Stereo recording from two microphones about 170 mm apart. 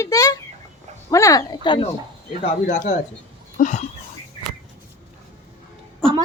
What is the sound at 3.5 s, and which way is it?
Speech, 45° left (ahead or behind).